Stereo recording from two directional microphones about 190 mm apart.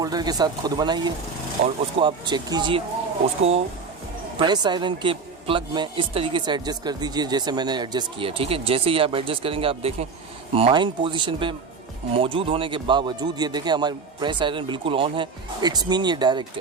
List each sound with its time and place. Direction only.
0.0 s speech: 20° right (ahead or behind)
4.4 s speech: 20° right (ahead or behind)